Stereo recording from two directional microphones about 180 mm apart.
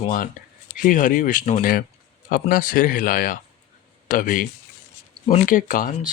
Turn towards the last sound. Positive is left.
turn(degrees=50)  # may be behind; listen again after turning